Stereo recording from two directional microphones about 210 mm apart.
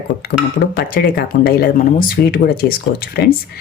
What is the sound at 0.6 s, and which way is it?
Speech, 45° left (ahead or behind).